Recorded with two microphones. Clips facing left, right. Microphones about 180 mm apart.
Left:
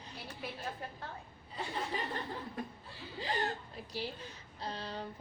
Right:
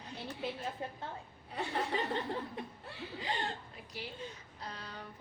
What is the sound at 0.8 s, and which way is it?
Speech, 20° right (ahead or behind).